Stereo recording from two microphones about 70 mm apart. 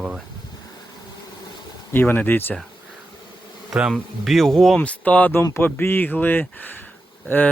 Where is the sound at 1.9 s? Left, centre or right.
Left.